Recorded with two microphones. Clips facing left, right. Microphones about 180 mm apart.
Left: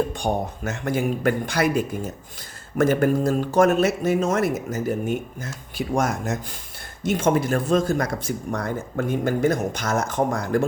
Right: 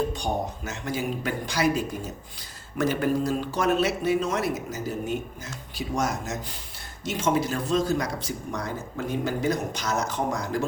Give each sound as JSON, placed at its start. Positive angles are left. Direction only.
{"t": 0.1, "sound": "speech", "side_deg": 55}